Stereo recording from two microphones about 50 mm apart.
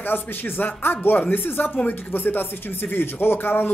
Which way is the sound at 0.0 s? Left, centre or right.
Left.